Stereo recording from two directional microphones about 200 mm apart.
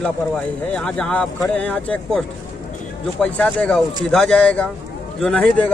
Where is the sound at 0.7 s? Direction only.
5° left (ahead or behind).